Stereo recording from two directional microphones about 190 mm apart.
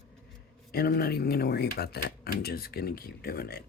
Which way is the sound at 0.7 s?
55° left (ahead or behind).